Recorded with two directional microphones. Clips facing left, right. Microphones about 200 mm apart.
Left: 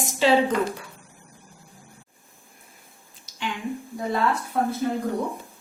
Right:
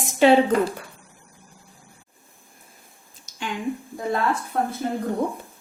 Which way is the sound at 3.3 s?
45° right (ahead or behind).